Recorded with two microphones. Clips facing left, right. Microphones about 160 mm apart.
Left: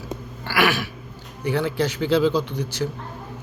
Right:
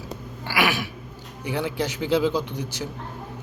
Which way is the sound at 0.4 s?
15° right (ahead or behind).